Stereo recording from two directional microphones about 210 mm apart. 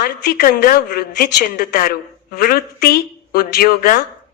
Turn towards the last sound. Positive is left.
turn(degrees=45)  # may be behind; listen again after turning